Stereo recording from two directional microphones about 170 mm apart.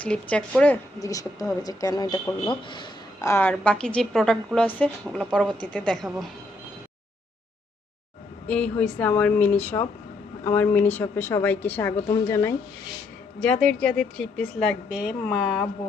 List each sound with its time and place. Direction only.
0.0 s a woman's voice: 5° left (ahead or behind)
0.9 s a woman's voice: 20° left (ahead or behind); by 6.3 s centre (ahead or behind)
8.4 s a woman's voice: 5° left (ahead or behind)
13.4 s a woman's voice: 5° left (ahead or behind)